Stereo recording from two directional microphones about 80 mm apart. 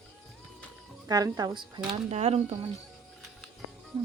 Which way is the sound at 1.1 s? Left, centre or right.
Right.